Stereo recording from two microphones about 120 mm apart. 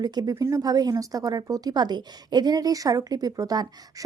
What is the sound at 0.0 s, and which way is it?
Speech, 35° right (ahead or behind).